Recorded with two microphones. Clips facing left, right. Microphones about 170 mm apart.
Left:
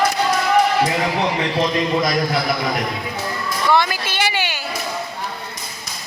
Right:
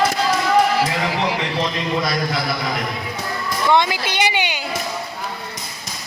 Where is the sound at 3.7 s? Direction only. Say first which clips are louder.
Right 1 dB; 20° right (ahead or behind).